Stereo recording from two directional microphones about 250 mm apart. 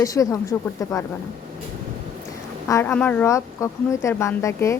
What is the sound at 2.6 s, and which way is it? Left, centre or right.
A woman's voice, centre.